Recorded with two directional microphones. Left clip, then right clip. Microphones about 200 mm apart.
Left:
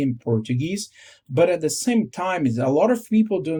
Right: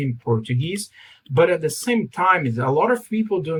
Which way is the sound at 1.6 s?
50° left (ahead or behind).